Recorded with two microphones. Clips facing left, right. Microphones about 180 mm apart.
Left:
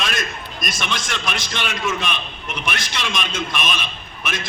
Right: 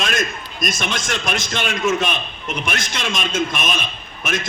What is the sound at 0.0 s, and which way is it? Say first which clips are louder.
A man's voice: right 3 dB; 45° right (ahead or behind).